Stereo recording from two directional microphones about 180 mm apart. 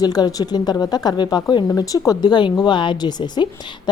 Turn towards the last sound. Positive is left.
turn(degrees=25)  # may be behind; listen again after turning